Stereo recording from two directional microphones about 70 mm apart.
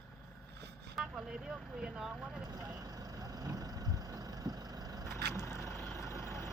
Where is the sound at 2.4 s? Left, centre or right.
Right.